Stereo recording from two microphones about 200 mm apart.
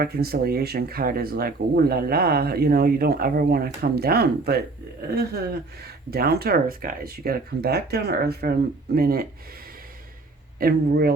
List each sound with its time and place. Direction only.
0.0 s speech: 50° right (ahead or behind)
5.8 s speech: 50° right (ahead or behind)
10.6 s speech: 50° right (ahead or behind)